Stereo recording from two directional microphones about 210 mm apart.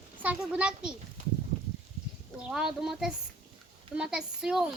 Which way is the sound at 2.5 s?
5° right (ahead or behind).